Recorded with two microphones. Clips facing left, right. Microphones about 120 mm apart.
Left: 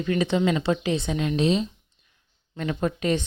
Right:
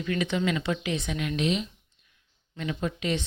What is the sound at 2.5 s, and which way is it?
Speech, 45° left (ahead or behind).